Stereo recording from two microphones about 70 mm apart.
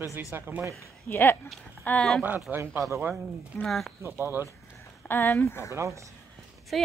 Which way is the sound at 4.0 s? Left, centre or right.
Right.